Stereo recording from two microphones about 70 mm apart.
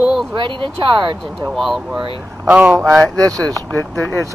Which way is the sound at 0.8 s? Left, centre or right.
Right.